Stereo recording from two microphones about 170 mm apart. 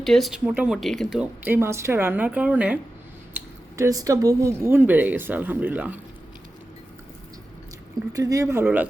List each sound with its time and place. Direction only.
0.0 s speech: centre (ahead or behind)
3.3 s speech: 20° right (ahead or behind)
8.1 s speech: 20° right (ahead or behind)